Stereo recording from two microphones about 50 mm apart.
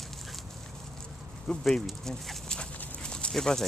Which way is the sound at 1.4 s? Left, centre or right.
Centre.